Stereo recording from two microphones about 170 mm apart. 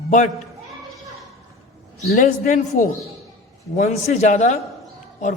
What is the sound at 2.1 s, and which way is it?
Speech, 50° left (ahead or behind).